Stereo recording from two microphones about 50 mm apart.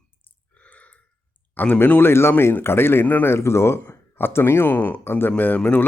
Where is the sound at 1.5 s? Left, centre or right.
Left.